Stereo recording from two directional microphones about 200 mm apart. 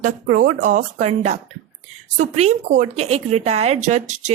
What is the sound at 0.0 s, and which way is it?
Speech, 40° right (ahead or behind).